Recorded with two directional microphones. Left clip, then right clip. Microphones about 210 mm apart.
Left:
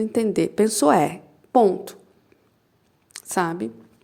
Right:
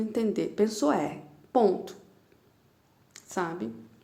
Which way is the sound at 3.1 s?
40° left (ahead or behind).